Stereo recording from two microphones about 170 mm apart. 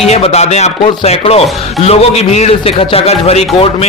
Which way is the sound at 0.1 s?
40° left (ahead or behind).